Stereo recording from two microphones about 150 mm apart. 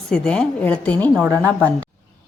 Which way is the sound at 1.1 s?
10° right (ahead or behind).